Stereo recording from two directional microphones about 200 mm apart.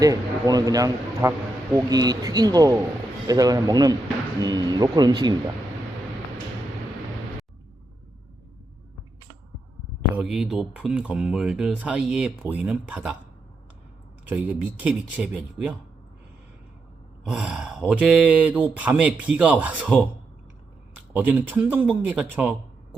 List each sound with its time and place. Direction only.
0.0 s speech: 20° right (ahead or behind)
10.2 s speech: 5° right (ahead or behind)
14.3 s speech: 10° right (ahead or behind)
17.2 s speech: 5° right (ahead or behind)